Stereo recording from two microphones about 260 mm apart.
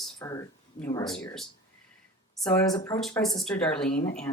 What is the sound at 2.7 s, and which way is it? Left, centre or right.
Speech, centre.